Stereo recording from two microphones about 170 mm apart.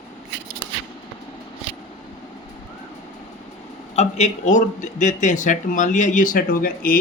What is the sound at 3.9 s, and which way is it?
Speech, 40° left (ahead or behind).